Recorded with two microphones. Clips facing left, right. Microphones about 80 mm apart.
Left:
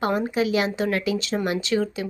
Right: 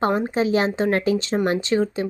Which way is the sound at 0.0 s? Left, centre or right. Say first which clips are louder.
Right 2 dB; right.